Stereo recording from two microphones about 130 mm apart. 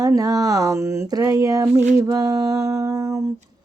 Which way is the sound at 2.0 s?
30° right (ahead or behind).